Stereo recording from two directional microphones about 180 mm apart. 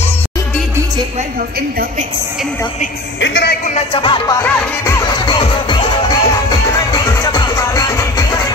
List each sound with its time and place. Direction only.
3.2 s speech: 80° left
3.6 s music: 35° left (ahead or behind)
4.4 s music: 15° left (ahead or behind)